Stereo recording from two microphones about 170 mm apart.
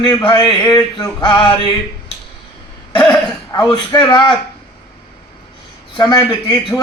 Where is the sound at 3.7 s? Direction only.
25° left (ahead or behind).